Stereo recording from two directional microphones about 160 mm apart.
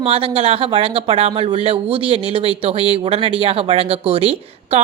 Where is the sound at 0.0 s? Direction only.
35° right (ahead or behind).